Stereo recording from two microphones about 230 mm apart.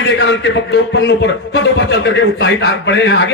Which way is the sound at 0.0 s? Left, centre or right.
Left.